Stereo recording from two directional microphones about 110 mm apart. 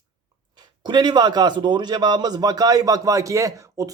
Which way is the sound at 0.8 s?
40° right (ahead or behind).